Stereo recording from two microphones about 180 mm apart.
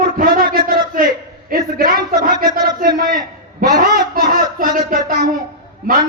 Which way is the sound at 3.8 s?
50° right (ahead or behind).